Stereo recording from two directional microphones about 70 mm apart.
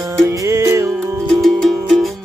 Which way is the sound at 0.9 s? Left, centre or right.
Centre.